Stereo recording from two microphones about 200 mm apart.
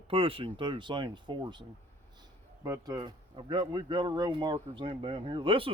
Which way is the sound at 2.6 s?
15° right (ahead or behind).